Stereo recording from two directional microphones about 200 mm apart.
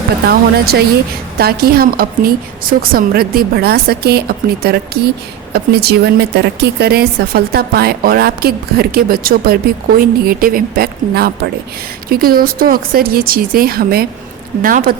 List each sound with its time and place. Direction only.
0.3 s speech: 50° right (ahead or behind)